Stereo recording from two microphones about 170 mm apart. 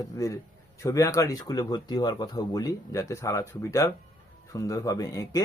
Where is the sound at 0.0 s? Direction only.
20° left (ahead or behind).